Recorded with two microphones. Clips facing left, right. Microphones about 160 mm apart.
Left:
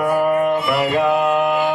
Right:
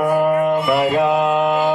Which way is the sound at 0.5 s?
5° right (ahead or behind).